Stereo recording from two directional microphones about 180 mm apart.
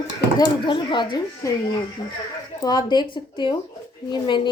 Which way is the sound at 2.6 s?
25° left (ahead or behind).